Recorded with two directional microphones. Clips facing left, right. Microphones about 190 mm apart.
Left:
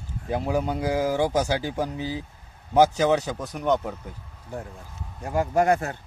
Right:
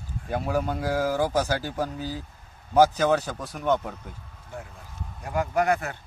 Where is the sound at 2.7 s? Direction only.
5° left (ahead or behind).